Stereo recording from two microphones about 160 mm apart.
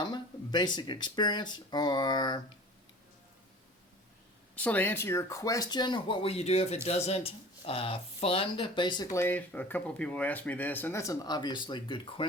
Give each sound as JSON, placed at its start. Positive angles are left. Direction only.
{"t": 0.0, "sound": "speech", "side_deg": 25}
{"t": 4.5, "sound": "speech", "side_deg": 10}